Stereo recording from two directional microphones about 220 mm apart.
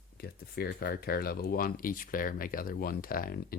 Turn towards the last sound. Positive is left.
turn(degrees=40)  # may be behind; listen again after turning